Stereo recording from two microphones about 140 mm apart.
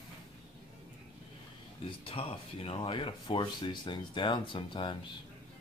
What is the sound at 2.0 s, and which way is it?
Speech, 40° left (ahead or behind).